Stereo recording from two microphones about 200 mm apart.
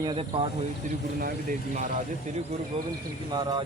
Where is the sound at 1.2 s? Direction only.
40° right (ahead or behind).